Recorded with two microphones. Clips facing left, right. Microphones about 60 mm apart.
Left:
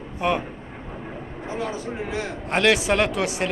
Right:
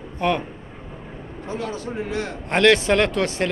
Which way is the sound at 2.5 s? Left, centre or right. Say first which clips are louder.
Right 3 dB; centre.